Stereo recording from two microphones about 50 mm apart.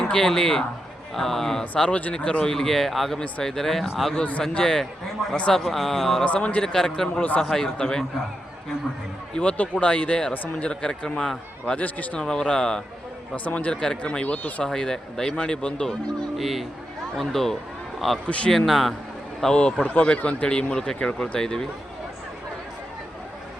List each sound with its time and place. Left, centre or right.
0.0 s speech: centre
1.7 s speech: left; by 4.1 s centre
4.1 s speech: left
4.5 s speech: centre
6.2 s speech: left
6.6 s speech: centre
9.3 s speech: left
11.8 s speech: left
12.1 s speech: centre
13.3 s speech: left
13.7 s speech: centre
14.6 s speech: centre
16.4 s speech: centre
19.8 s speech: left